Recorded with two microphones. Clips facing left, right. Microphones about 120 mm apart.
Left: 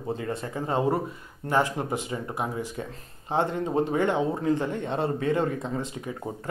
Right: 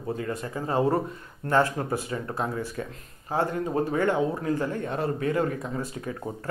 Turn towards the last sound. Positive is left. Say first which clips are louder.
# even
turn(degrees=20)  # may be behind; listen again after turning